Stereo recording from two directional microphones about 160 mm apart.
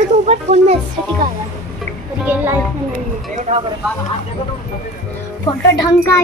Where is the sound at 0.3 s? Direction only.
40° right (ahead or behind).